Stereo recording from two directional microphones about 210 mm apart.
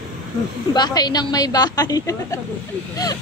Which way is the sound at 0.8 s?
20° left (ahead or behind).